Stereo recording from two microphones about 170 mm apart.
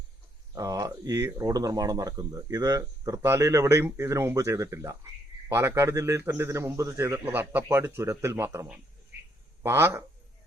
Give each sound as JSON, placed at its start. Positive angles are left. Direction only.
{"t": 0.5, "sound": "a man's voice", "side_deg": -20}